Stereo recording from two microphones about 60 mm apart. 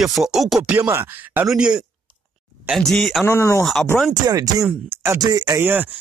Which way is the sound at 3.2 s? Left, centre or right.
Left.